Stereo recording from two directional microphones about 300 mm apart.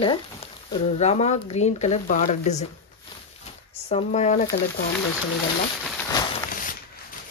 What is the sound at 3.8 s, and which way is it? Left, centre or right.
Speech, left.